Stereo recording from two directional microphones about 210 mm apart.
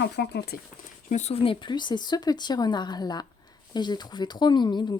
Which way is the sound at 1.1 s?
30° left (ahead or behind).